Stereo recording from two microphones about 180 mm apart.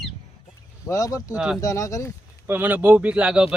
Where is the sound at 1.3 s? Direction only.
5° right (ahead or behind).